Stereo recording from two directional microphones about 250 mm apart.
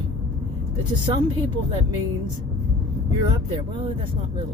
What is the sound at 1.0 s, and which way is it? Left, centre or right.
Speech, centre.